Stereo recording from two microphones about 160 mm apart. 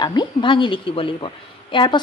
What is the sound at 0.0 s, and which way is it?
A woman's voice, 30° left (ahead or behind).